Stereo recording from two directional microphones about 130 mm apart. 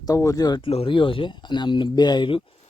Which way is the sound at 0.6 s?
45° left (ahead or behind).